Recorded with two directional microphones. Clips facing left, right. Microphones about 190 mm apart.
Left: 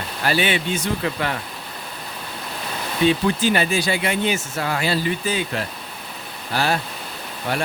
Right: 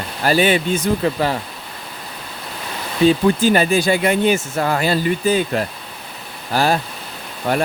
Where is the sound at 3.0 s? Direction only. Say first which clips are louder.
Right 5 dB; 45° right (ahead or behind).